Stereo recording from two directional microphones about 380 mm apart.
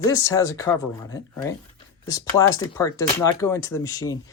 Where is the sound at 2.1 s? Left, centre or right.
Centre.